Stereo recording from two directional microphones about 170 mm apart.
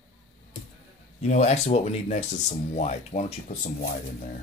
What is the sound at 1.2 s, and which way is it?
Speech, 40° left (ahead or behind).